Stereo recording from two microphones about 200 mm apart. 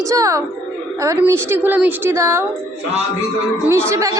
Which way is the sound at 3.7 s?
15° right (ahead or behind).